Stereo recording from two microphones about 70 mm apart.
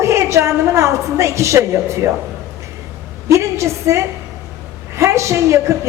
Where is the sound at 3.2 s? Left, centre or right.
Right.